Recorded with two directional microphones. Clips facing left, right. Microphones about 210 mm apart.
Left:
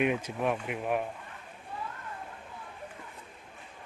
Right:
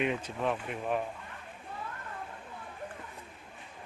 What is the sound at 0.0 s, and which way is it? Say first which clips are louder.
Speech: left 3 dB; 10° left (ahead or behind).